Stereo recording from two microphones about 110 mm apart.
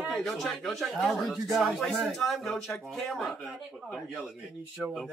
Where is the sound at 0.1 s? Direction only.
Centre (ahead or behind).